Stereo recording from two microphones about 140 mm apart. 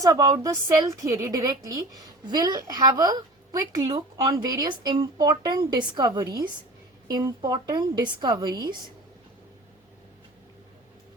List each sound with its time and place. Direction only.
0.0 s a woman's voice: 25° right (ahead or behind)